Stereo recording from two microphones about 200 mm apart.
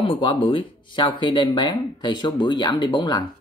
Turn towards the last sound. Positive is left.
turn(degrees=20)  # may be behind; listen again after turning